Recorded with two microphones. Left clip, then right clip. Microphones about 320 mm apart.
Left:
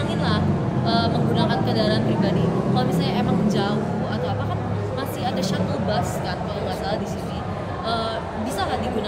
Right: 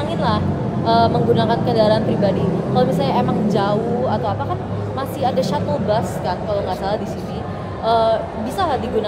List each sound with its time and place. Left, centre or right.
0.8 s speech: centre
5.2 s speech: centre
7.8 s speech: centre